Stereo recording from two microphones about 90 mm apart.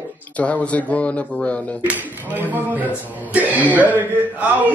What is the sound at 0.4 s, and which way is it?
Speech, 15° left (ahead or behind).